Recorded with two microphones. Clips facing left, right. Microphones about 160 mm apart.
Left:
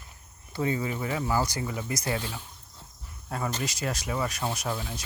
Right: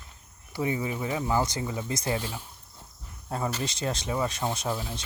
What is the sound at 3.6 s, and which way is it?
Speech, 25° right (ahead or behind).